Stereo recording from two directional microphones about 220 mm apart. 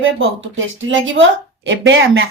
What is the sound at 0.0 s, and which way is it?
Speech, 60° right (ahead or behind).